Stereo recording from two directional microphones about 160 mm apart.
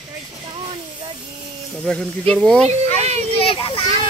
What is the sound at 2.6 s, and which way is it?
Speech, 45° right (ahead or behind).